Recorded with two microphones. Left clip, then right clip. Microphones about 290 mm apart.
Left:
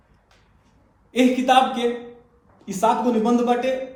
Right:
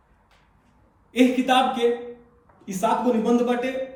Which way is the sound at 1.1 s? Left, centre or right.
Centre.